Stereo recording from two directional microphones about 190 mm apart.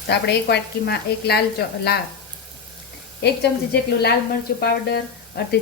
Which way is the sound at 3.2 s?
60° left (ahead or behind).